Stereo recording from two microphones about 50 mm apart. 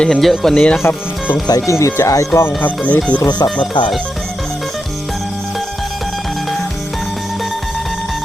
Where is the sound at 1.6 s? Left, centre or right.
Left.